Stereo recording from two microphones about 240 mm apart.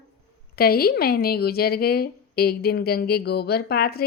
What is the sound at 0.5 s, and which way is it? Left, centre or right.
A woman's voice, left.